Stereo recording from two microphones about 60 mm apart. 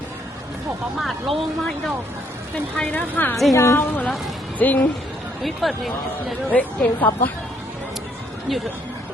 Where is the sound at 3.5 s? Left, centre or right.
Left.